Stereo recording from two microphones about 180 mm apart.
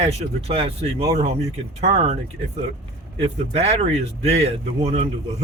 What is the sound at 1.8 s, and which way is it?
Speech, 35° right (ahead or behind).